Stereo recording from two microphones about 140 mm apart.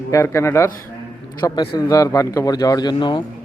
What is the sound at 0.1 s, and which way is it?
Speech, 20° left (ahead or behind).